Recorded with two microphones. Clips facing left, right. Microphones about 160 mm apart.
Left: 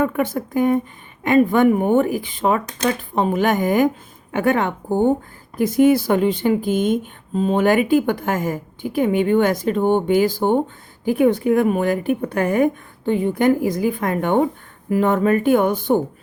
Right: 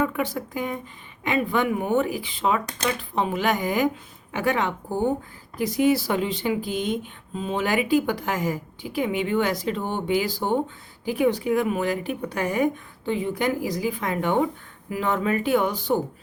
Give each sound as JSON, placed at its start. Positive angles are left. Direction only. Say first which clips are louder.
{"t": 0.0, "sound": "speech", "louder": "left 5 dB", "side_deg": 50}